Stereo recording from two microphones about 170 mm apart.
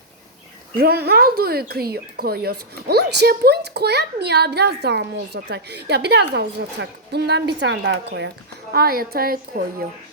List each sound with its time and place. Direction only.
0.8 s speech: 65° right (ahead or behind); by 8.3 s 85° right
8.7 s a woman's voice: 60° right (ahead or behind)